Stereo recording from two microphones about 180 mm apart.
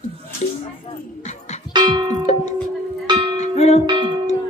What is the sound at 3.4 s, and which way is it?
Music, 40° left (ahead or behind).